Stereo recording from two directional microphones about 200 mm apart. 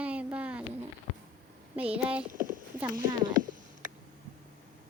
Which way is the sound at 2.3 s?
40° right (ahead or behind).